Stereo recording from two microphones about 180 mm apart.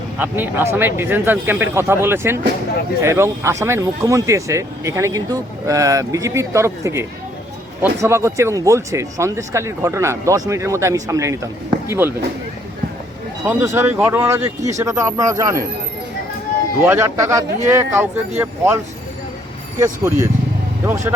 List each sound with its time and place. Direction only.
0.2 s speech: 10° right (ahead or behind)
13.4 s speech: 10° right (ahead or behind)
16.8 s speech: 15° right (ahead or behind)
19.8 s speech: 15° right (ahead or behind)